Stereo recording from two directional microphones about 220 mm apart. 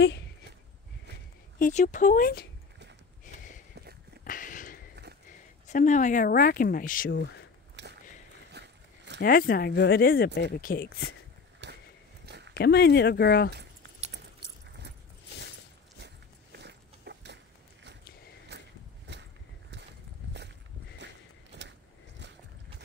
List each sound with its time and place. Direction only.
1.6 s speech: 35° left (ahead or behind)
4.2 s a sound: 40° left (ahead or behind)
5.7 s speech: 35° left (ahead or behind)
7.7 s a sound: 50° right (ahead or behind)
8.5 s horse: 50° right (ahead or behind)
9.2 s speech: 40° left (ahead or behind)
11.6 s a sound: 50° right (ahead or behind)
12.5 s speech: 45° left (ahead or behind)
16.5 s biting: 50° right (ahead or behind)
18.5 s walk: 50° right (ahead or behind)
19.1 s a sound: 50° right (ahead or behind)
21.5 s vehicle: 50° right (ahead or behind)